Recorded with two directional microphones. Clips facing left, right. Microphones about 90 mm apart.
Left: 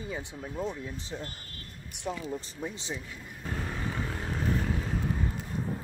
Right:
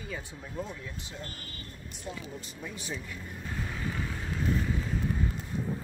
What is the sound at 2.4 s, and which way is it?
Speech, 25° left (ahead or behind).